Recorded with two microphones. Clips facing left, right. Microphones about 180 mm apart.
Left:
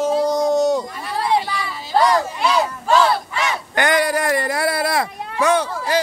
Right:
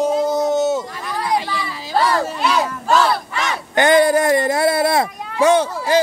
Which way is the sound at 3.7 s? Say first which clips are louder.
Right 6 dB; 25° right (ahead or behind).